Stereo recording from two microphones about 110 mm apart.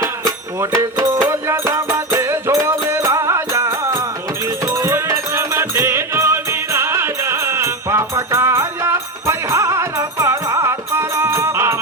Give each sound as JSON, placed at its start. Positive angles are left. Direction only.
{"t": 0.8, "sound": "music", "side_deg": -25}